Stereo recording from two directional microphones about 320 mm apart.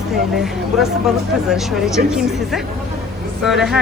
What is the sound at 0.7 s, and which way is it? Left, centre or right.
Speech, centre.